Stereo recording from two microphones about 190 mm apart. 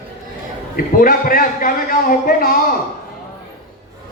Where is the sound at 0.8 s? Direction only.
50° left (ahead or behind).